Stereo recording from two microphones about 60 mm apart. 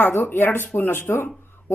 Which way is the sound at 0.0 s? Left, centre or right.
Left.